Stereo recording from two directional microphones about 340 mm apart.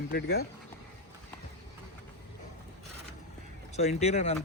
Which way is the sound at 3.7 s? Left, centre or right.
Centre.